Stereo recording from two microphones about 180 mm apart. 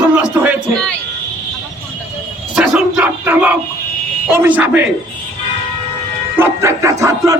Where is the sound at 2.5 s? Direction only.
5° right (ahead or behind).